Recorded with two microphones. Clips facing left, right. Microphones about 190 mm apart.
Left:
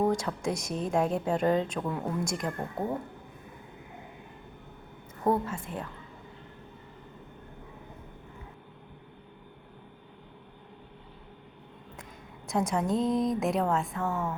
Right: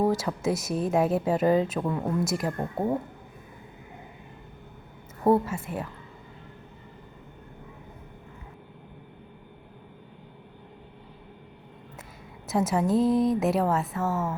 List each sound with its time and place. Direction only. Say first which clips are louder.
0.0 s a woman's voice: right 3 dB; 5° right (ahead or behind)
5.2 s a woman's voice: right 5 dB; 10° right (ahead or behind)
12.5 s a woman's voice: right 4 dB; 5° right (ahead or behind)